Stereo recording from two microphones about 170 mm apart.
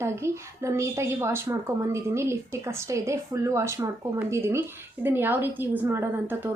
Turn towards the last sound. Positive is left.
turn(degrees=-10)  # may be behind; listen again after turning